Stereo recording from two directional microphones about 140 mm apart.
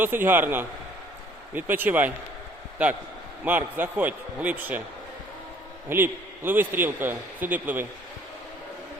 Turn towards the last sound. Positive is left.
turn(degrees=-10)  # may be behind; listen again after turning